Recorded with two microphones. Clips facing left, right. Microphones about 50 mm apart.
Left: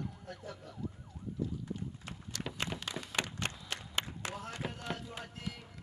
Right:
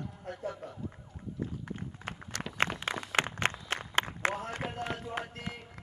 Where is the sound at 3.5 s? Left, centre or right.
Right.